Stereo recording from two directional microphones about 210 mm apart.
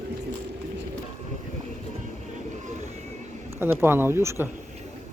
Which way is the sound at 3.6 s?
10° right (ahead or behind).